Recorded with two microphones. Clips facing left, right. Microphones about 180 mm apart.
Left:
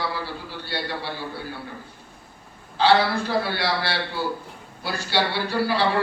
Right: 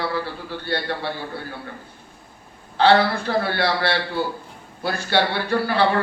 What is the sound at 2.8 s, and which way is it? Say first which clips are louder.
A man's voice: right 2 dB; 55° right (ahead or behind).